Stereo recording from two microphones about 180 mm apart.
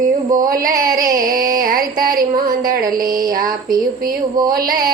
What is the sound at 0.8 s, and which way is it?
Carnatic music, 50° right (ahead or behind).